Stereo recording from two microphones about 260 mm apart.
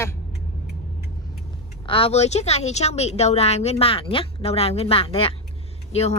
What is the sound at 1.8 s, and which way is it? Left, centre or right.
Speech, left.